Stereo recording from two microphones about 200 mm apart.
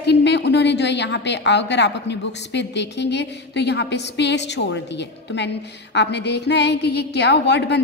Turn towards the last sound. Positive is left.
turn(degrees=60)  # may be behind; listen again after turning